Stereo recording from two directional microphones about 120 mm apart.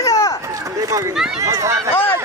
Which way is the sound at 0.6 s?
30° right (ahead or behind).